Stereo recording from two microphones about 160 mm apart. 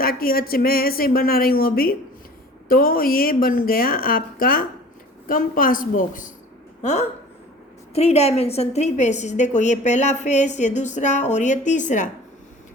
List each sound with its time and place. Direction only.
0.0 s a woman's voice: 65° left (ahead or behind)
7.9 s a woman's voice: 40° left (ahead or behind)